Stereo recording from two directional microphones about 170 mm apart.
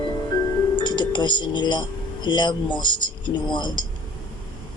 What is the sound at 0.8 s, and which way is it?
Music, 25° left (ahead or behind).